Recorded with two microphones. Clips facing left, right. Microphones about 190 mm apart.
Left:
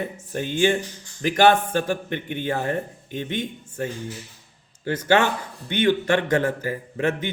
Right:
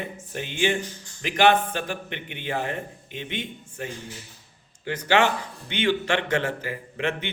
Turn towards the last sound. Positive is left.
turn(degrees=40)  # may be behind; listen again after turning